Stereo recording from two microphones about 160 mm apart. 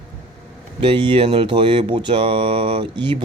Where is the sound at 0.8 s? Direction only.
30° right (ahead or behind).